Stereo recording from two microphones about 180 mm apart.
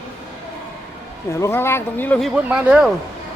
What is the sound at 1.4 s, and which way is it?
Speech, 15° left (ahead or behind).